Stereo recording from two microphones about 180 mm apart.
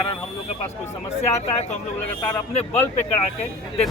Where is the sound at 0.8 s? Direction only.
40° left (ahead or behind).